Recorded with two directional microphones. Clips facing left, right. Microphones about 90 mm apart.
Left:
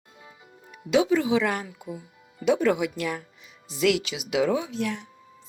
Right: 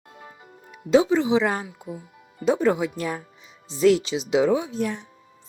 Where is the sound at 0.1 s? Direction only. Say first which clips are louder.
Right 5 dB; 50° right (ahead or behind).